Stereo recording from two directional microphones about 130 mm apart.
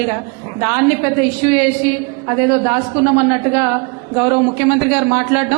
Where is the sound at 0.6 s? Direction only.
20° right (ahead or behind).